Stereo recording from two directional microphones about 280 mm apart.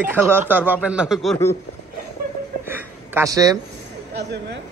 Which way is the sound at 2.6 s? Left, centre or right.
Centre.